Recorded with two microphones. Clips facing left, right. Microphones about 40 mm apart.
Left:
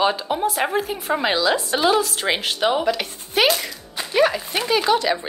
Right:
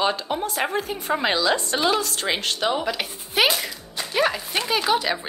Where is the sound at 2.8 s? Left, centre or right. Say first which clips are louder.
Left 4 dB; centre.